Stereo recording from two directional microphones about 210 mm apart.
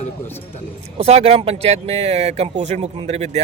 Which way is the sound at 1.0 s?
30° right (ahead or behind).